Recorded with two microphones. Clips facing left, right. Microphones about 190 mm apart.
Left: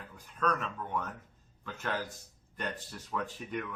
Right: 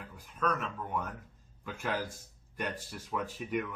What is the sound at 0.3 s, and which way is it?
Speech, 5° right (ahead or behind).